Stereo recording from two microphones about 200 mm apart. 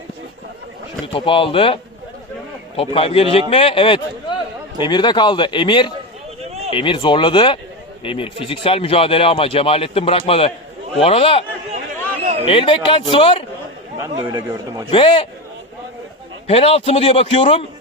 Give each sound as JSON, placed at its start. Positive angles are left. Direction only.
{"t": 1.0, "sound": "speech", "side_deg": 25}
{"t": 12.5, "sound": "speech", "side_deg": 25}
{"t": 14.0, "sound": "a man's voice", "side_deg": -15}
{"t": 14.8, "sound": "speech", "side_deg": 25}
{"t": 16.5, "sound": "speech", "side_deg": 30}